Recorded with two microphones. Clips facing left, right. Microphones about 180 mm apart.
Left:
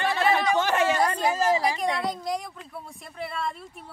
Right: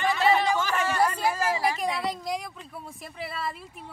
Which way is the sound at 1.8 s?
Centre (ahead or behind).